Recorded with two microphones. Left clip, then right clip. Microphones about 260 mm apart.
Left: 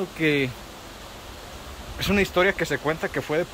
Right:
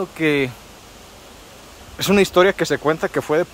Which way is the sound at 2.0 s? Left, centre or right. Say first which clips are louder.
Right 7 dB; right.